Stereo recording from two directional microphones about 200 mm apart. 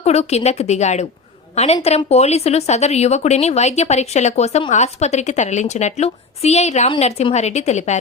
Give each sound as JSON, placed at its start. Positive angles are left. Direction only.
{"t": 0.0, "sound": "speech", "side_deg": 35}